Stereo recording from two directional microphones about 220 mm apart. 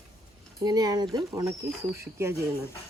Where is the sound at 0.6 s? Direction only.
15° right (ahead or behind).